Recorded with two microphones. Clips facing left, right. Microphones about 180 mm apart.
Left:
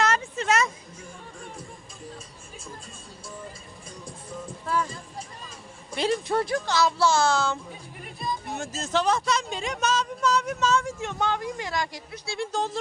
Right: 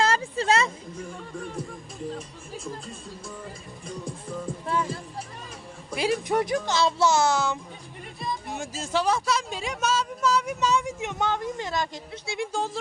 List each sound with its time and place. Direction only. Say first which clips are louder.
0.0 s a sound: right 1 dB; 30° right (ahead or behind)
4.6 s music: left 1 dB; 25° right (ahead or behind)
5.9 s speech: even; 10° right (ahead or behind)